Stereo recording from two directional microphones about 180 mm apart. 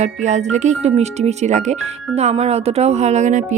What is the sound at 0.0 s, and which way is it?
Speech, 40° right (ahead or behind).